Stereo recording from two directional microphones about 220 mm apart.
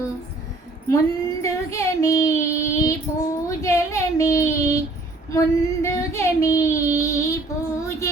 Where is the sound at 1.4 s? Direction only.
15° left (ahead or behind).